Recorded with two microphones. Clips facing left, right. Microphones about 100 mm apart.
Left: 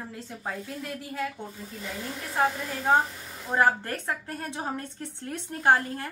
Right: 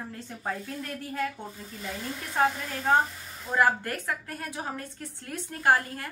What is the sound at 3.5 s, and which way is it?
A woman's voice, 25° left (ahead or behind).